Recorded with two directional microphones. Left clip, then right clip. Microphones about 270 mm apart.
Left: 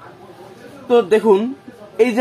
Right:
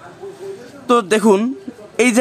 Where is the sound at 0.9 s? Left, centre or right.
Right.